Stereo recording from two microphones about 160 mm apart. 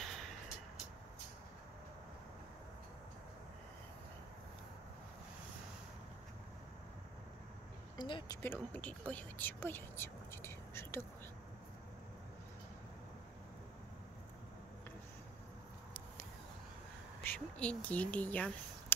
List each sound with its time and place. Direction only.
0.0 s a sound: centre (ahead or behind)
8.0 s speech: 30° left (ahead or behind)
8.4 s speech: 10° left (ahead or behind)
17.2 s speech: 10° left (ahead or behind)